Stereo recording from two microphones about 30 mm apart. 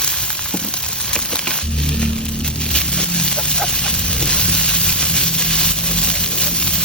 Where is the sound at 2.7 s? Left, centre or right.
Left.